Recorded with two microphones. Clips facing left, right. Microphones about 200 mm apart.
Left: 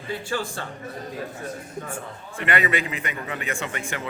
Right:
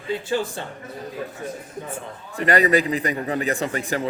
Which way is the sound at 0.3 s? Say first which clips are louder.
Right 4 dB; 20° right (ahead or behind).